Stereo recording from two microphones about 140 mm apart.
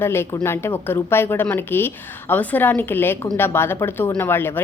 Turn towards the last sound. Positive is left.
turn(degrees=15)  # may be behind; listen again after turning